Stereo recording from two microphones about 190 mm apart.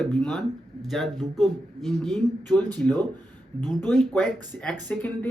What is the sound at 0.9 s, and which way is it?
Speech, centre (ahead or behind).